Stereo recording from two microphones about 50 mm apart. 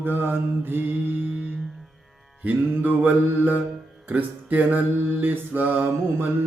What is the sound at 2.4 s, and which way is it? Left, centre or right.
Music, right.